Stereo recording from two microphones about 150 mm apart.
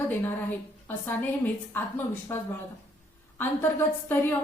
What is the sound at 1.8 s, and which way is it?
A woman's voice, 10° left (ahead or behind).